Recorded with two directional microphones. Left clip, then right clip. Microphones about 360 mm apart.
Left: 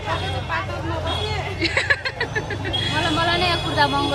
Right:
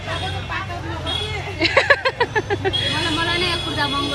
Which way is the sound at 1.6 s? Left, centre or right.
Centre.